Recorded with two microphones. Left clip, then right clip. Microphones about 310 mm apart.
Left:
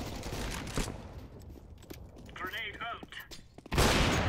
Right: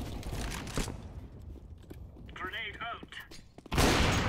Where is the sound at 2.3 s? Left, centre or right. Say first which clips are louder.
Even; centre.